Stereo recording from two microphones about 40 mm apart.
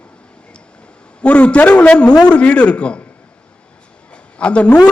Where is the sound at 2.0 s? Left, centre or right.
Left.